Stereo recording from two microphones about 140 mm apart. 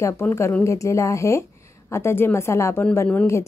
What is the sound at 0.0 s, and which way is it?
Speech, 20° left (ahead or behind).